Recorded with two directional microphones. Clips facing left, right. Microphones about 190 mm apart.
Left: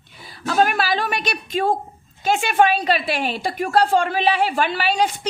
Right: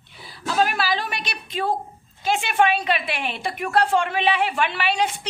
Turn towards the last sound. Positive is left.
turn(degrees=40)  # may be behind; listen again after turning